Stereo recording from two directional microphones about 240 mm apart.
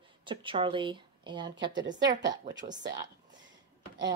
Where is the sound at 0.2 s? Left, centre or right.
Right.